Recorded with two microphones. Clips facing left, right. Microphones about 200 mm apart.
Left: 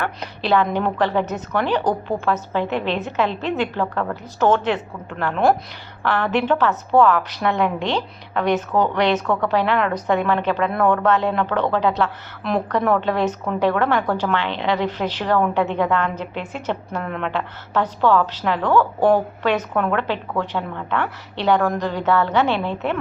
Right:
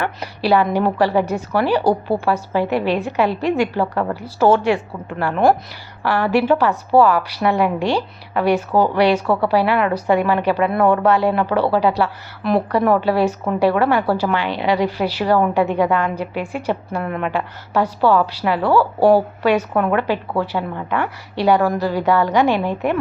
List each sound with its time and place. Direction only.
0.0 s a woman's voice: 10° right (ahead or behind)